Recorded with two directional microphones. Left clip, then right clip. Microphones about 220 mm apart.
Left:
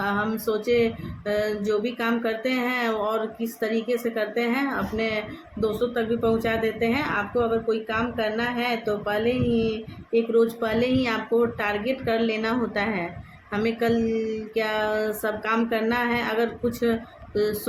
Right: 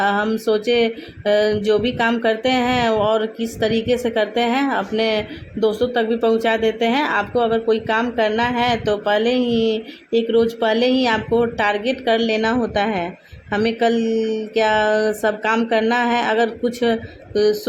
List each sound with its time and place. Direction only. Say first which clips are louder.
0.0 s speech: right 7 dB; 25° right (ahead or behind)